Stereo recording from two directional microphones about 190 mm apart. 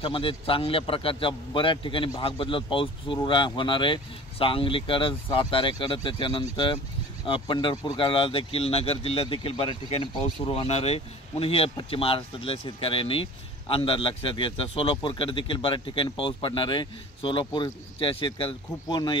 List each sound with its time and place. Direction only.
0.0 s speech: 25° left (ahead or behind)